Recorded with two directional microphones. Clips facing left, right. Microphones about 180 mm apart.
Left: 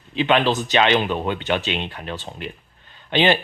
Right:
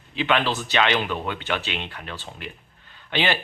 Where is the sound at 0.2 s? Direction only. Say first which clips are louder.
Left 5 dB; 20° left (ahead or behind).